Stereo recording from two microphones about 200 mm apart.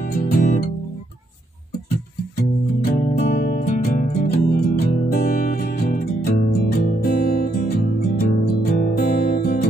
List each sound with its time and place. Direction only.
0.0 s music: 50° left (ahead or behind)
2.8 s music: 40° left (ahead or behind)